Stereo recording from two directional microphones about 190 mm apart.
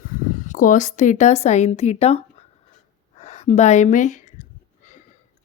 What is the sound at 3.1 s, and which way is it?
Gasp, 35° left (ahead or behind).